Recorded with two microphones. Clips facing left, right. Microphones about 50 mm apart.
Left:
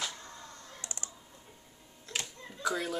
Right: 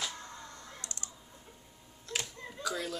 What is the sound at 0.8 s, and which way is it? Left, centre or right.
Typing, centre.